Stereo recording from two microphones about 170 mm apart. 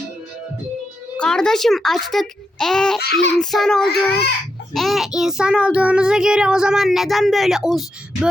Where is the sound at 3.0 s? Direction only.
70° left (ahead or behind).